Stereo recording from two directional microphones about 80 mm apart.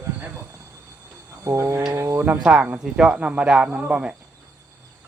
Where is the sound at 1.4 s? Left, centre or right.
Right.